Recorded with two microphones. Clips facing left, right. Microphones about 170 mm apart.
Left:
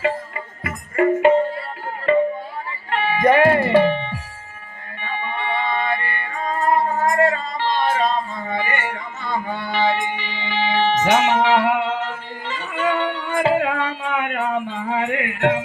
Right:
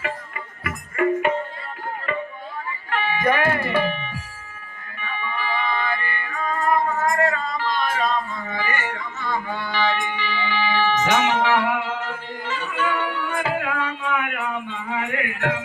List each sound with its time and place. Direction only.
0.0 s music: 25° left (ahead or behind)
2.9 s music: 25° left (ahead or behind)